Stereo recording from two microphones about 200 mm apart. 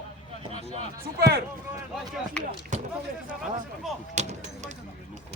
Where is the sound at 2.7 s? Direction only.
40° right (ahead or behind).